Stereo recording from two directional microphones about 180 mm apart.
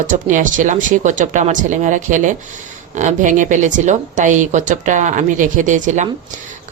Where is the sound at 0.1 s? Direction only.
45° right (ahead or behind).